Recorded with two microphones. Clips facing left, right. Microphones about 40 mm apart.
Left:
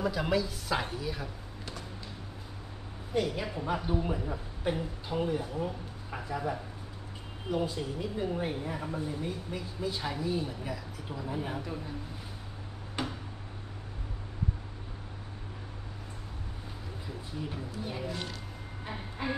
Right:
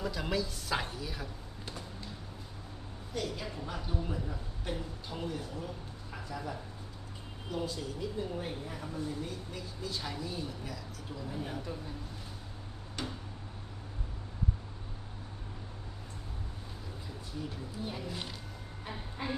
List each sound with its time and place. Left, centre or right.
0.0 s speech: centre
3.1 s speech: left
13.0 s a sound: left
17.8 s speech: centre